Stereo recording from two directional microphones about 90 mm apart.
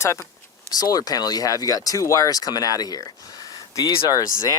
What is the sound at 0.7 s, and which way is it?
Speech, 45° left (ahead or behind).